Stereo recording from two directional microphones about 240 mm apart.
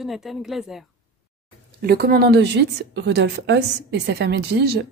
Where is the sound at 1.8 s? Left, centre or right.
Right.